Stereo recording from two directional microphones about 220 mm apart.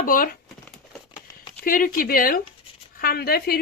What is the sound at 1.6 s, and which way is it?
Speech, 40° left (ahead or behind).